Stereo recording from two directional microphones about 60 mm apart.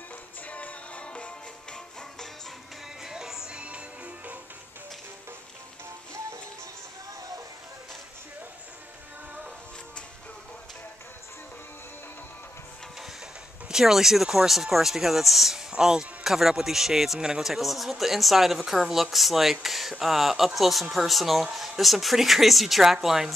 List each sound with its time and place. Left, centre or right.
0.5 s music: left
3.0 s music: centre
13.7 s speech: centre